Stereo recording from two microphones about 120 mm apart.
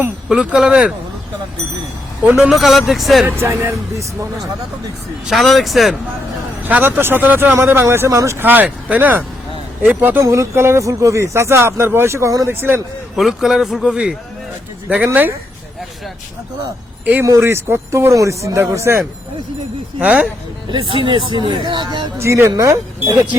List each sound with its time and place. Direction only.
0.3 s speech: 5° right (ahead or behind)
2.4 s speech: centre (ahead or behind)
3.2 s speech: 20° right (ahead or behind)
5.2 s speech: centre (ahead or behind)
6.7 s speech: 15° right (ahead or behind)
13.1 s speech: centre (ahead or behind)
17.2 s speech: 25° right (ahead or behind)
20.0 s speech: 10° right (ahead or behind)
20.7 s speech: 45° right (ahead or behind)
22.2 s speech: 25° right (ahead or behind)